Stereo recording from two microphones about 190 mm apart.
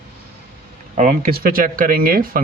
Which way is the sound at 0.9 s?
40° right (ahead or behind).